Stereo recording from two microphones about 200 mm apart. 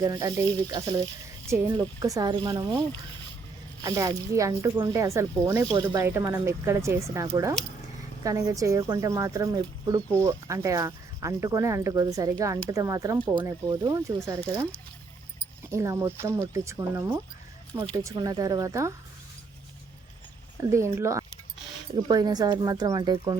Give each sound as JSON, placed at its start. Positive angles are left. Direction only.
{"t": 0.0, "sound": "speech", "side_deg": -15}
{"t": 15.7, "sound": "speech", "side_deg": -15}
{"t": 20.6, "sound": "speech", "side_deg": -15}